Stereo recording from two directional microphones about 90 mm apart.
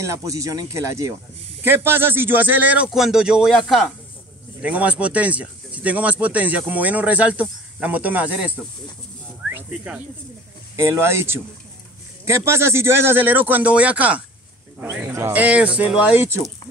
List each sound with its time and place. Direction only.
0.0 s speech: 35° right (ahead or behind); by 2.9 s 15° right (ahead or behind)
2.9 s speech: 5° right (ahead or behind)
4.6 s speech: 15° right (ahead or behind)
9.5 s speech: 15° right (ahead or behind)
10.8 s speech: 30° right (ahead or behind)
15.4 s speech: 15° right (ahead or behind)